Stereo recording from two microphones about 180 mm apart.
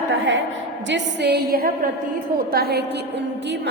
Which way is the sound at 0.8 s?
85° right.